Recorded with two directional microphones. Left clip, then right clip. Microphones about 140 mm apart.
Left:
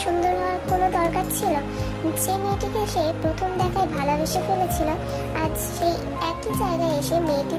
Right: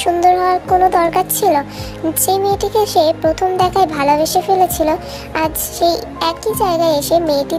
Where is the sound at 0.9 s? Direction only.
45° right (ahead or behind).